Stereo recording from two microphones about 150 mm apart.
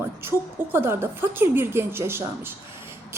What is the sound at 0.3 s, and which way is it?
Speech, 15° right (ahead or behind).